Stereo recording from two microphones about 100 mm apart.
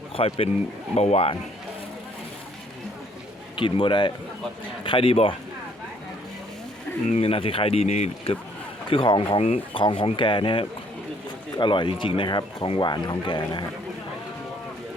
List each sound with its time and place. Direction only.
0.2 s speech: 70° left (ahead or behind)
0.9 s speech: 85° left
3.5 s speech: 60° left (ahead or behind)
7.2 s speech: 70° left (ahead or behind)
8.9 s speech: 60° left (ahead or behind)
9.4 s speech: 90° left
9.8 s speech: 60° left (ahead or behind)